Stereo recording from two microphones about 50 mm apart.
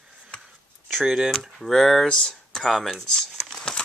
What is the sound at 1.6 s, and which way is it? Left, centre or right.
Speech, centre.